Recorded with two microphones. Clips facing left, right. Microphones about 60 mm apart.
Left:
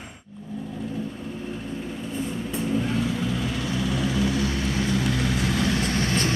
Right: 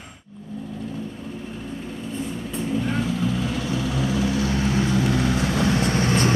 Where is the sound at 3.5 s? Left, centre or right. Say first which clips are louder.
Right 1 dB; centre.